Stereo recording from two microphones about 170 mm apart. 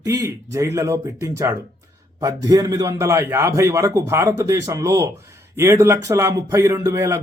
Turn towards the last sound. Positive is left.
turn(degrees=-15)  # may be behind; listen again after turning